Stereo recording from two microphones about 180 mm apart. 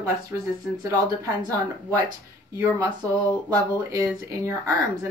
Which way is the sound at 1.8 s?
15° right (ahead or behind).